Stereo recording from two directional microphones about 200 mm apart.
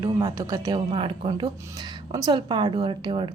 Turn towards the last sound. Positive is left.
turn(degrees=-25)  # may be behind; listen again after turning